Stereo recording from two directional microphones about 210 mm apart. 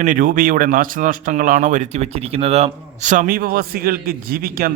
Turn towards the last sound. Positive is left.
turn(degrees=-45)  # may be behind; listen again after turning